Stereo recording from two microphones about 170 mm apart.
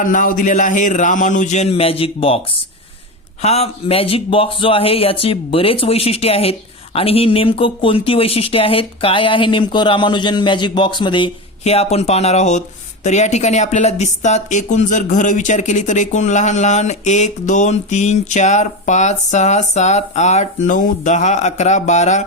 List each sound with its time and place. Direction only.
0.0 s speech: 50° left (ahead or behind); by 2.4 s 35° left (ahead or behind)
3.4 s speech: 40° left (ahead or behind)